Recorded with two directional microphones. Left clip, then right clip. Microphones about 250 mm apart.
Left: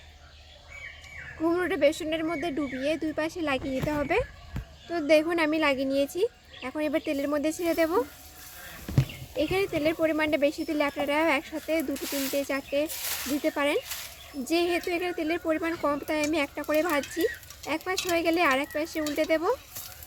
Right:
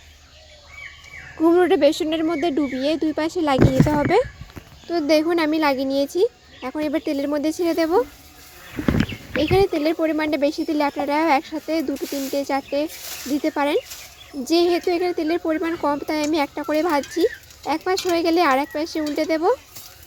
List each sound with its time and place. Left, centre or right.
1.4 s speech: centre
4.9 s speech: centre
9.4 s speech: centre